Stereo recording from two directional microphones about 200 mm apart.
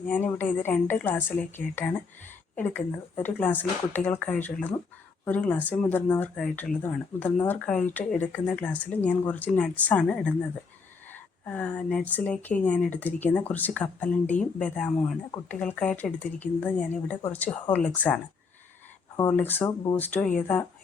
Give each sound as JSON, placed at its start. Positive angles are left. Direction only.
{"t": 0.1, "sound": "speech", "side_deg": 10}
{"t": 19.3, "sound": "speech", "side_deg": 10}